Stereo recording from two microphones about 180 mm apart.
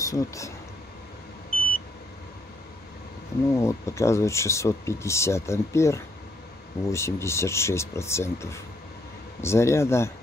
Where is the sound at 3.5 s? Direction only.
15° left (ahead or behind).